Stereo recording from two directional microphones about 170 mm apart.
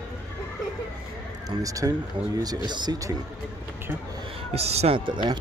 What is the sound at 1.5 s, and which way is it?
Speech, 20° right (ahead or behind).